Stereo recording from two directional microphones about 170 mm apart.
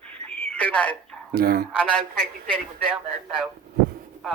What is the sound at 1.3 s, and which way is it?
Speech, 65° right (ahead or behind).